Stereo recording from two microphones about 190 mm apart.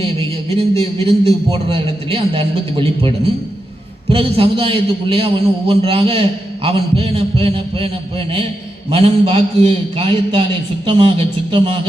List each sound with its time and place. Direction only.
0.0 s a sound: 30° right (ahead or behind)
0.8 s a man's voice: 30° right (ahead or behind)
4.1 s a man's voice: 30° right (ahead or behind)
8.9 s a man's voice: 30° right (ahead or behind)